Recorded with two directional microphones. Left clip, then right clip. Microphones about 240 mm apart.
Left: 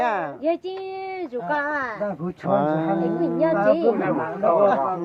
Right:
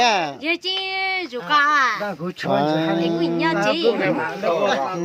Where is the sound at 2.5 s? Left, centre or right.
Right.